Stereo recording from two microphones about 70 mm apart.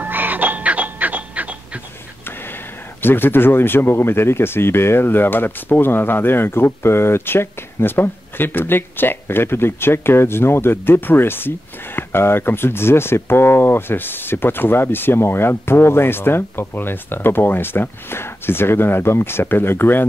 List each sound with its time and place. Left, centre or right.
0.0 s music: right
3.0 s speech: left